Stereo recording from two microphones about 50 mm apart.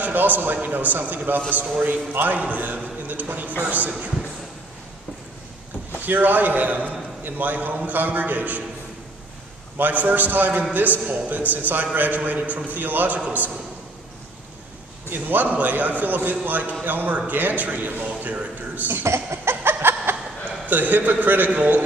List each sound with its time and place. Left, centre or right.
0.0 s a man's voice: right
5.9 s a man's voice: right
9.8 s a man's voice: right
15.0 s a man's voice: right
19.0 s a sound: right
20.6 s a man's voice: right